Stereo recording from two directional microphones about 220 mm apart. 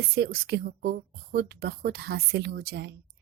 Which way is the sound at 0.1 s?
50° right (ahead or behind).